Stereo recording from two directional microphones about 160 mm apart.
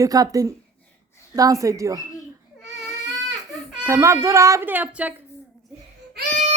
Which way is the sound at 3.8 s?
20° right (ahead or behind).